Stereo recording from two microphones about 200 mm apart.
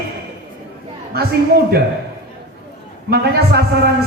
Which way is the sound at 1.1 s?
50° right (ahead or behind).